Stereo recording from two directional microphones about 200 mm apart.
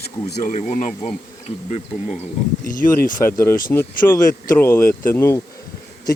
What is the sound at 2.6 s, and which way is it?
Speech, 45° left (ahead or behind).